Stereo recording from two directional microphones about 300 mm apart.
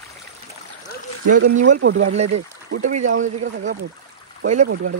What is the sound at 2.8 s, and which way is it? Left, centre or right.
Speech, right.